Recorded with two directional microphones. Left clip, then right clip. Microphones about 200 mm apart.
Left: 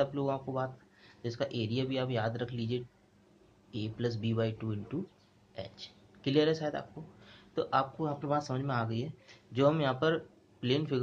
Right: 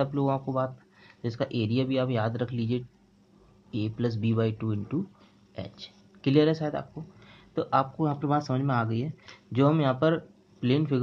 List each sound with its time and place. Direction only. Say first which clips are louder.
0.0 s a man's voice: right 4 dB; 30° right (ahead or behind)